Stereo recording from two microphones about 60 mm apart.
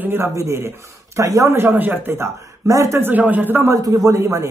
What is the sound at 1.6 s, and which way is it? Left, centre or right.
Speech, right.